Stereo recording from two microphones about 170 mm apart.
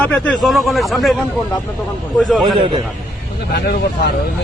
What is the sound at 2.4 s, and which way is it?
Speech, 30° right (ahead or behind).